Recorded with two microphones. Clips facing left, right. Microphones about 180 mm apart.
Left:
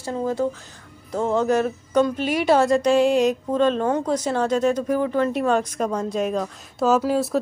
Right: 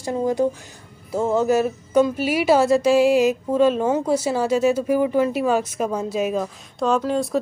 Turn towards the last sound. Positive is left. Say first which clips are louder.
# left 1 dB
turn(degrees=5)  # may be behind; listen again after turning